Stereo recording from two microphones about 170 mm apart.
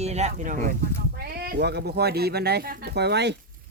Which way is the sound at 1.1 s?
65° right (ahead or behind).